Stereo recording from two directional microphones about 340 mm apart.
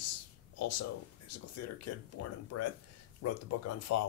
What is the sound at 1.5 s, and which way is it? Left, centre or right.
Speech, left.